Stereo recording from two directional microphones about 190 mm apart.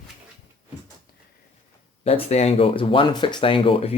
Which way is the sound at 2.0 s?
35° left (ahead or behind).